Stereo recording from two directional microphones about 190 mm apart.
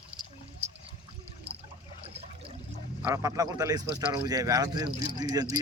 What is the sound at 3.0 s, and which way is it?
Speech, 15° right (ahead or behind).